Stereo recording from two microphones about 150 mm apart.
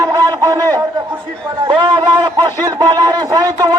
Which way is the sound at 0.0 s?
20° right (ahead or behind).